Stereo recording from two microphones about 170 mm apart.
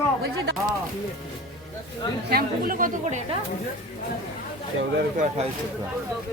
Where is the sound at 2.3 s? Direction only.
60° right (ahead or behind).